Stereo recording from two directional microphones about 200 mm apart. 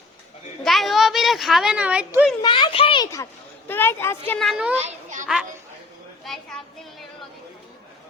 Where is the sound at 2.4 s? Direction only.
25° left (ahead or behind).